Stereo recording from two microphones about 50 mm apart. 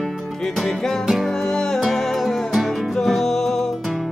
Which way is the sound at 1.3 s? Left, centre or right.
Centre.